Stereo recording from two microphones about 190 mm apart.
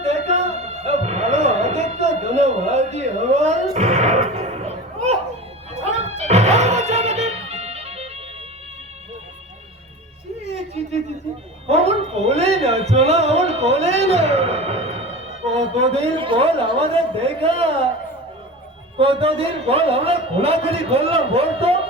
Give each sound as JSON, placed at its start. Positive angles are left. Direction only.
{"t": 0.0, "sound": "music", "side_deg": -35}
{"t": 10.4, "sound": "a sound", "side_deg": -35}
{"t": 11.7, "sound": "music", "side_deg": -35}
{"t": 18.9, "sound": "a man's voice", "side_deg": -30}